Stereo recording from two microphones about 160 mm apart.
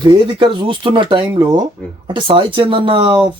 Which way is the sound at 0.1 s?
30° right (ahead or behind).